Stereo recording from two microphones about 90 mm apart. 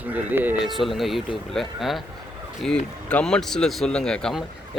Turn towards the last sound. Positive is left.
turn(degrees=5)  # may be behind; listen again after turning